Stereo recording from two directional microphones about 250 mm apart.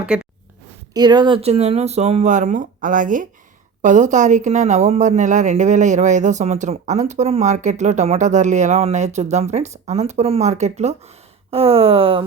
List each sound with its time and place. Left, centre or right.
0.0 s speech: centre
0.9 s speech: centre